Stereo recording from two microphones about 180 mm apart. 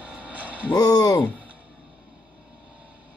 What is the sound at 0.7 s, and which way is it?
Speech, 20° left (ahead or behind).